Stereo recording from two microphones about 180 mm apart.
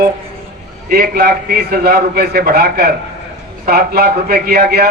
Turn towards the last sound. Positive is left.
turn(degrees=-60)  # may be behind; listen again after turning